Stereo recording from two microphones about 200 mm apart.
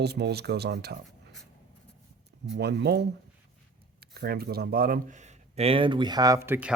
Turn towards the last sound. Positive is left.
turn(degrees=-10)  # may be behind; listen again after turning